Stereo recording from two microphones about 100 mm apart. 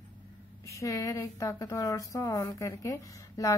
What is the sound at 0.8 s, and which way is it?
A woman's voice, 35° left (ahead or behind).